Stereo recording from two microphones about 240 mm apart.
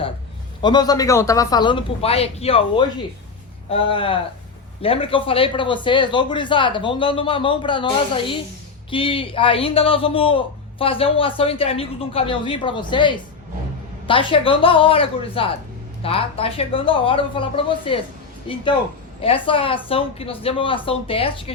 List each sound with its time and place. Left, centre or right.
0.6 s a man's voice: centre